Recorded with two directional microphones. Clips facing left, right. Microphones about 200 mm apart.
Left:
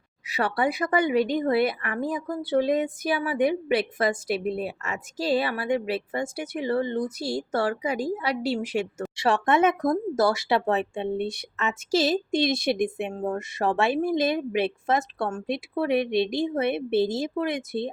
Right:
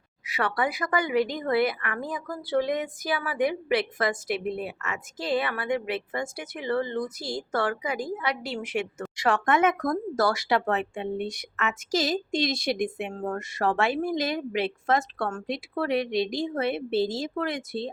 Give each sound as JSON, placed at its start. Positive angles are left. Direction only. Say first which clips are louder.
{"t": 0.3, "sound": "a woman's voice", "louder": "left 2 dB", "side_deg": 30}